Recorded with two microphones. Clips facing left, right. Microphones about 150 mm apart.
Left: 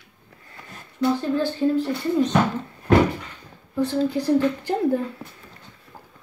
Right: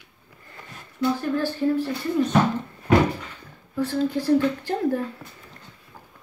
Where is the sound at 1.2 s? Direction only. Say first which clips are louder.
Left 2 dB; 20° left (ahead or behind).